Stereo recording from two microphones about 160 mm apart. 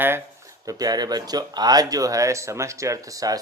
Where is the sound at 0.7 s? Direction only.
25° right (ahead or behind).